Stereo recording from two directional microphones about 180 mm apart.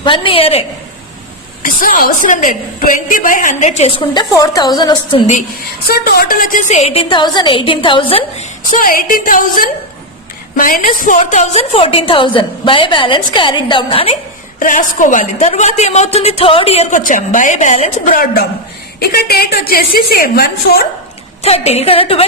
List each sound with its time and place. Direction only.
0.0 s a woman's voice: 30° left (ahead or behind)
1.6 s a woman's voice: 50° left (ahead or behind); by 5.2 s 25° left (ahead or behind)
5.9 s a woman's voice: 60° left (ahead or behind); by 8.4 s 30° left (ahead or behind)
8.7 s a woman's voice: 50° left (ahead or behind); by 14.2 s 30° left (ahead or behind)
14.6 s a woman's voice: 45° left (ahead or behind)
21.4 s a woman's voice: 35° left (ahead or behind)